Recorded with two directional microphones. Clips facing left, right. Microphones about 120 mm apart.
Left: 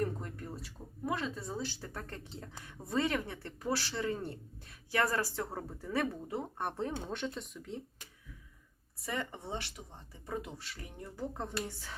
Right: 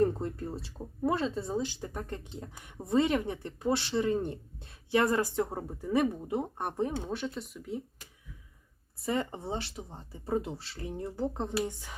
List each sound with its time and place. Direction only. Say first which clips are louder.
0.0 s speech: right 8 dB; 25° right (ahead or behind); by 7.8 s 5° right (ahead or behind)
9.0 s speech: right 7 dB; 30° right (ahead or behind)